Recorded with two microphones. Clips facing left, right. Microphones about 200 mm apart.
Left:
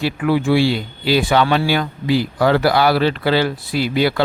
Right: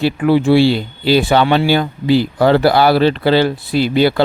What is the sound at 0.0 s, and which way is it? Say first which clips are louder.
Speech: right 5 dB; 30° right (ahead or behind).